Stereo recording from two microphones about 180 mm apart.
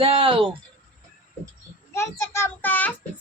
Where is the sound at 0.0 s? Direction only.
30° right (ahead or behind).